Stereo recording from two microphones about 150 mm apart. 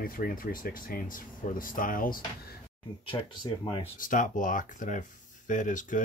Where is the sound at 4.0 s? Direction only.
60° left (ahead or behind).